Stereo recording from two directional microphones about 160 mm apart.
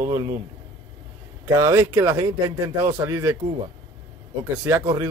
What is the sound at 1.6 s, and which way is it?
A man's voice, 20° right (ahead or behind).